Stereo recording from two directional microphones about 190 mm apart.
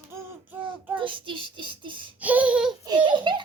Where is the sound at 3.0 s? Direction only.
25° right (ahead or behind).